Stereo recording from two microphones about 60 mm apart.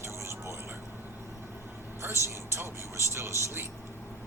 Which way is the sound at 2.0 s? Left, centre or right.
Right.